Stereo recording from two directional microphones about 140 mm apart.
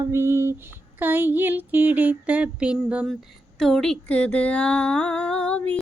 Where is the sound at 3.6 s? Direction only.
Centre (ahead or behind).